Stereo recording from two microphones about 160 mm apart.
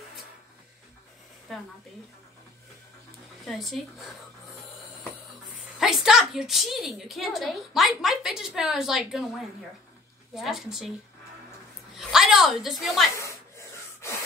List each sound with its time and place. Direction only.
1.5 s speech: centre (ahead or behind)
3.4 s speech: centre (ahead or behind)
5.8 s speech: centre (ahead or behind)
12.0 s a woman's voice: 5° right (ahead or behind)
13.6 s wood: 15° left (ahead or behind)